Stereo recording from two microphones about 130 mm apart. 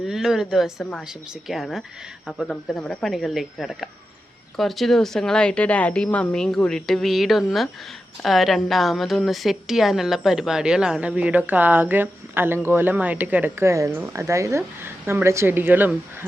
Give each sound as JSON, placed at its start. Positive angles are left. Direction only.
{"t": 0.0, "sound": "a woman's voice", "side_deg": -5}